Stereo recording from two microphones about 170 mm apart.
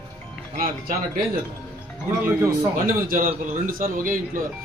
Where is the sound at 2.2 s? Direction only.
20° right (ahead or behind).